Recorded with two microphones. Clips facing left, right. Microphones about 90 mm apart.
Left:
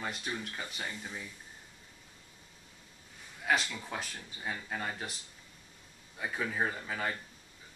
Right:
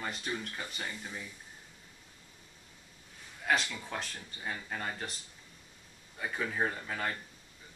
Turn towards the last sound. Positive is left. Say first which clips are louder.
# even
turn(degrees=5)  # may be behind; listen again after turning